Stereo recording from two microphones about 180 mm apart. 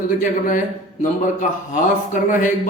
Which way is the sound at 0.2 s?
50° left (ahead or behind).